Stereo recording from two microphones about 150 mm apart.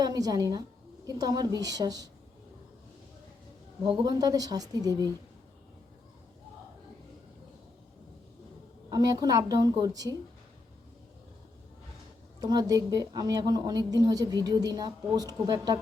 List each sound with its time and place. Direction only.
0.0 s a woman's voice: 25° right (ahead or behind)
3.8 s a woman's voice: 30° right (ahead or behind)
8.9 s a woman's voice: 25° right (ahead or behind)
12.4 s a woman's voice: 25° right (ahead or behind)